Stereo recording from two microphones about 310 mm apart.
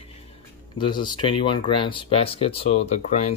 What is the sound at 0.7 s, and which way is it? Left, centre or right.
Speech, centre.